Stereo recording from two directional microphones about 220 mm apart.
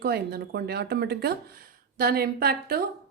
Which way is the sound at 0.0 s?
45° right (ahead or behind).